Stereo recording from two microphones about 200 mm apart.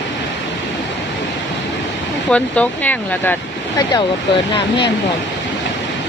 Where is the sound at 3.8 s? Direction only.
20° left (ahead or behind).